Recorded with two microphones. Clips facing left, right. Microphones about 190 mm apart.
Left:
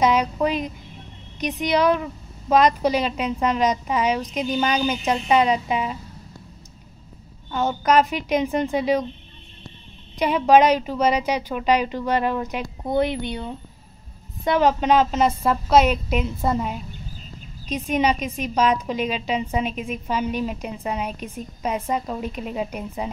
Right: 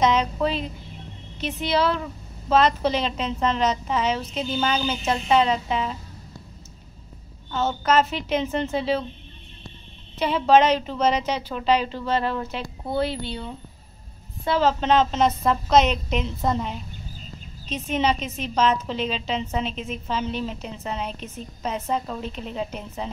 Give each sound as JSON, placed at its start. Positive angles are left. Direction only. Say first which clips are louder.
{"t": 0.0, "sound": "a woman's voice", "louder": "left 1 dB", "side_deg": 10}
{"t": 7.5, "sound": "a woman's voice", "louder": "left 2 dB", "side_deg": 15}
{"t": 10.1, "sound": "a woman's voice", "louder": "left 2 dB", "side_deg": 15}
{"t": 14.4, "sound": "a woman's voice", "louder": "left 2 dB", "side_deg": 15}